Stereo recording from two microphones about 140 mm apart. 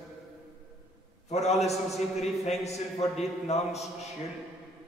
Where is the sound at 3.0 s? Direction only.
50° left (ahead or behind).